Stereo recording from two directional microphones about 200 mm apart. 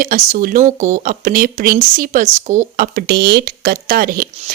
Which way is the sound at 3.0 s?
55° right (ahead or behind).